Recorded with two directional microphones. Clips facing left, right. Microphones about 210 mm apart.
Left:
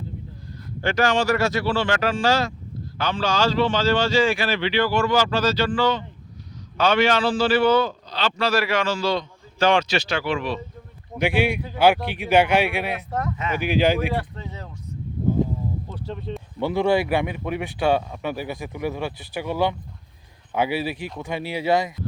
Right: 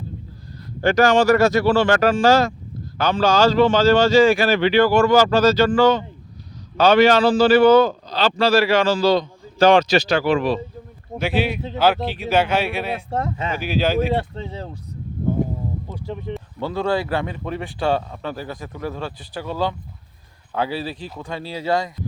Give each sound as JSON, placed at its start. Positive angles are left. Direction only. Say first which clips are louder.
{"t": 0.8, "sound": "a man's voice", "louder": "right 6 dB", "side_deg": -40}
{"t": 11.2, "sound": "speech", "louder": "even", "side_deg": 15}
{"t": 13.0, "sound": "speech", "louder": "right 3 dB", "side_deg": -30}
{"t": 13.6, "sound": "speech", "louder": "even", "side_deg": 15}
{"t": 14.1, "sound": "speech", "louder": "right 5 dB", "side_deg": -30}
{"t": 15.3, "sound": "a sound", "louder": "even", "side_deg": -55}
{"t": 15.9, "sound": "speech", "louder": "right 2 dB", "side_deg": -15}
{"t": 16.6, "sound": "speech", "louder": "left 2 dB", "side_deg": 15}